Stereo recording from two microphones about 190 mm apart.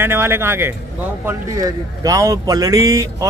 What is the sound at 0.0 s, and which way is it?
Speech, 10° right (ahead or behind).